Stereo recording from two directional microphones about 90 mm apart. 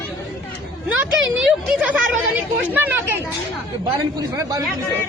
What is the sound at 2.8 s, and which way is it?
Speech, 25° right (ahead or behind).